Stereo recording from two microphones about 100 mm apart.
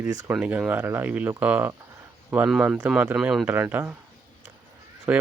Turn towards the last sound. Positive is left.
turn(degrees=-15)  # may be behind; listen again after turning